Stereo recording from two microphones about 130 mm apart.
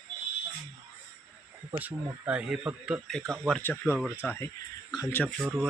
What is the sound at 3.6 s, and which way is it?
Speech, 15° left (ahead or behind).